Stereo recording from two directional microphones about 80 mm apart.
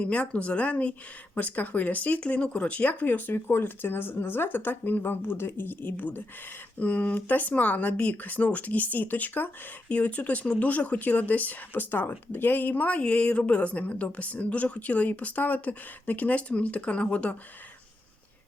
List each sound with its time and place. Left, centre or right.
0.0 s speech: centre